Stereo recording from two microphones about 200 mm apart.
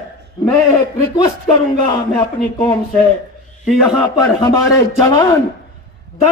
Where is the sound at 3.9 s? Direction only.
20° left (ahead or behind).